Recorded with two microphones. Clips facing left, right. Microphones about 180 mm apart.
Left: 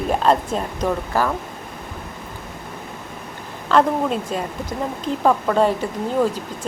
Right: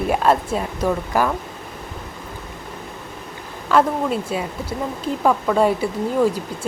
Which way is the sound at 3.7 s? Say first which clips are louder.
Even; 5° right (ahead or behind).